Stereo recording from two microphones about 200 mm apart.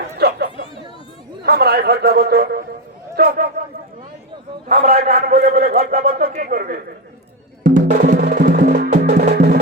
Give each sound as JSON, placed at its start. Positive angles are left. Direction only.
{"t": 0.2, "sound": "chatter", "side_deg": -55}
{"t": 1.4, "sound": "a man's voice", "side_deg": -50}
{"t": 4.8, "sound": "a man's voice", "side_deg": -50}
{"t": 7.6, "sound": "music", "side_deg": -40}